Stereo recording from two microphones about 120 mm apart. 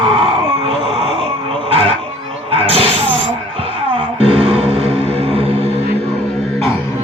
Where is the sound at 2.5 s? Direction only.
50° right (ahead or behind).